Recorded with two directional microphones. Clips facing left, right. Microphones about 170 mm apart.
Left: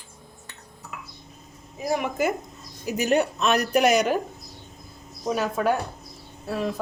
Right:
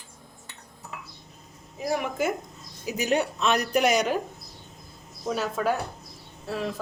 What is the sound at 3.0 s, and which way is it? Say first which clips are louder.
Speech: left 3 dB; 50° left (ahead or behind).